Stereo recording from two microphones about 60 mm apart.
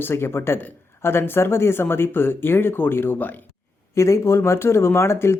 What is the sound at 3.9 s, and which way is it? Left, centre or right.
Speech, left.